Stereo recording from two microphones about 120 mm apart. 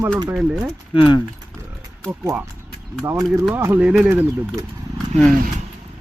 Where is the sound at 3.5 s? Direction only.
15° right (ahead or behind).